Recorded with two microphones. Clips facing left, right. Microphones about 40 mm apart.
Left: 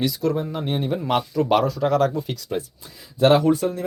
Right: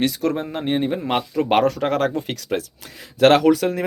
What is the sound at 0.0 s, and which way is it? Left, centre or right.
Speech, right.